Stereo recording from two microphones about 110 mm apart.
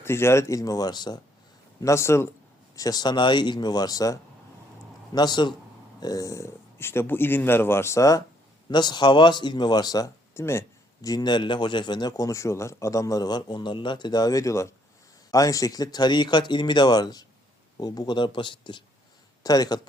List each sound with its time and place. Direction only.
0.0 s speech: 25° left (ahead or behind); by 1.2 s 40° left (ahead or behind)
1.8 s speech: 25° left (ahead or behind)
2.7 s speech: 35° left (ahead or behind)
8.7 s speech: 40° left (ahead or behind)
10.3 s speech: 25° left (ahead or behind); by 18.8 s 45° left (ahead or behind)
19.4 s speech: 35° left (ahead or behind)